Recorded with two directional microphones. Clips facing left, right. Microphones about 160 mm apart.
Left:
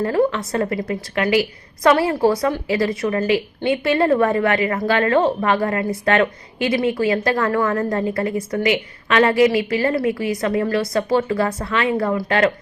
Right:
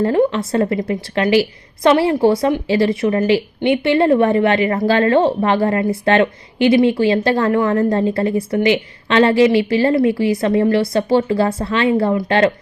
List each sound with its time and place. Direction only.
0.0 s a woman's voice: 30° right (ahead or behind)